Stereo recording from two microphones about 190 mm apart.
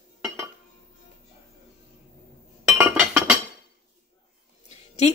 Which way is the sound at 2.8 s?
5° right (ahead or behind).